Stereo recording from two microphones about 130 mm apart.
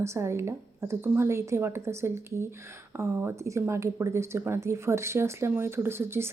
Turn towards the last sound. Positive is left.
turn(degrees=-20)  # may be behind; listen again after turning